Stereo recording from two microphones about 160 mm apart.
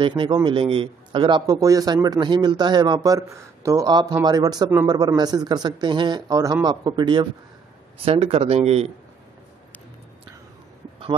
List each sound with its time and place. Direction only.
0.0 s a man's voice: 30° right (ahead or behind)